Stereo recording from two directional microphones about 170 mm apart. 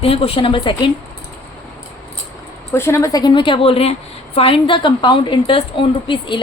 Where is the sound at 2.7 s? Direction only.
15° left (ahead or behind).